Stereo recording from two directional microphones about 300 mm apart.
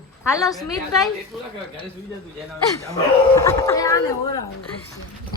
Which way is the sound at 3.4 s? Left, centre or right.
Centre.